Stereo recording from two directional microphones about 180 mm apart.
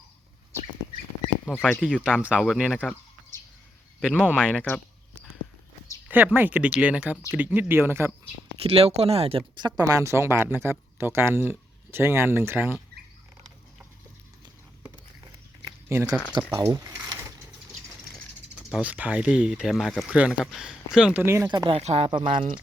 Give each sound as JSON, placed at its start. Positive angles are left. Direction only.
{"t": 1.5, "sound": "speech", "side_deg": 0}
{"t": 4.0, "sound": "speech", "side_deg": 5}
{"t": 6.1, "sound": "speech", "side_deg": -10}
{"t": 8.6, "sound": "speech", "side_deg": -35}
{"t": 9.6, "sound": "speech", "side_deg": -20}
{"t": 15.9, "sound": "speech", "side_deg": -15}
{"t": 16.7, "sound": "mechanisms", "side_deg": -15}
{"t": 18.7, "sound": "speech", "side_deg": -5}
{"t": 21.8, "sound": "speech", "side_deg": -35}